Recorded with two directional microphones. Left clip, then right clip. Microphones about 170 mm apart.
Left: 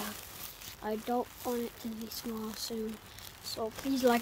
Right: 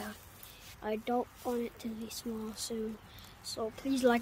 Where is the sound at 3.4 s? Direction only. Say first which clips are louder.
Left 1 dB; 5° left (ahead or behind).